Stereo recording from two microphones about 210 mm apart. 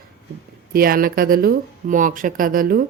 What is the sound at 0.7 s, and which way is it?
A man's voice, 45° right (ahead or behind).